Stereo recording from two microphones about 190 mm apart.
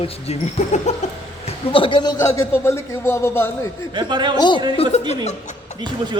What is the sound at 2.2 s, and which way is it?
Speech, 15° left (ahead or behind).